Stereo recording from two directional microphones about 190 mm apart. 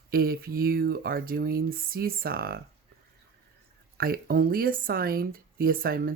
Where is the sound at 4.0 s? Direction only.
50° right (ahead or behind).